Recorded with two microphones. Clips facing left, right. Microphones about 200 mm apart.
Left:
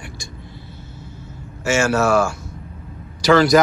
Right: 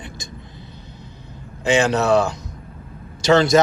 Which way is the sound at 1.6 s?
15° right (ahead or behind).